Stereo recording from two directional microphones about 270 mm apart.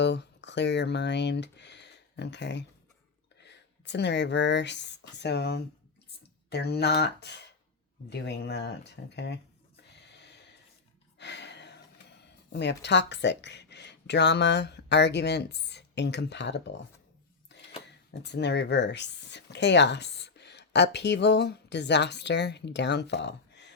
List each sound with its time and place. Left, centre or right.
0.0 s speech: left
9.9 s gasp: left
11.2 s speech: left
17.5 s a sound: left
18.1 s speech: left